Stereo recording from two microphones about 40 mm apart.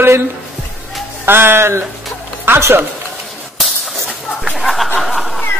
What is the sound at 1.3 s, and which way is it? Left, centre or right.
A man's voice, right.